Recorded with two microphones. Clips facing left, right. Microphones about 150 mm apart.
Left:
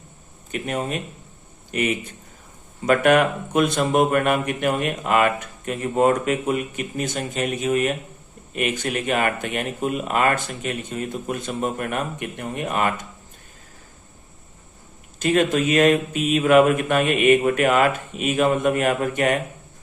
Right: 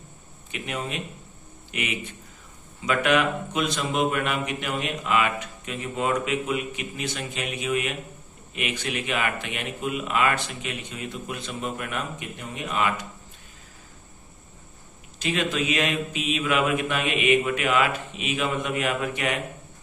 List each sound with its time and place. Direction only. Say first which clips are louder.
0.5 s a man's voice: left 6 dB; 45° left (ahead or behind)
15.2 s a man's voice: left 7 dB; 50° left (ahead or behind)